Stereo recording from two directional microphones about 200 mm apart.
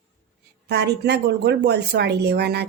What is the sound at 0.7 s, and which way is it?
Speech, 55° right (ahead or behind).